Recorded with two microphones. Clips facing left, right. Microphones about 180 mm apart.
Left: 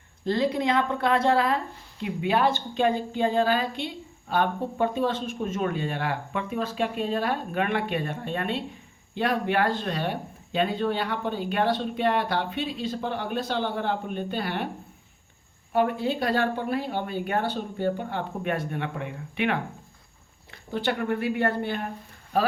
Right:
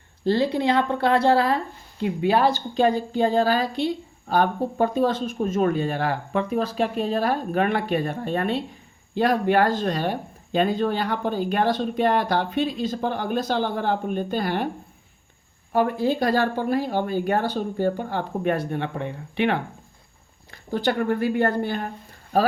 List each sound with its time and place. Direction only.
0.3 s speech: 30° right (ahead or behind)
15.7 s speech: 40° right (ahead or behind)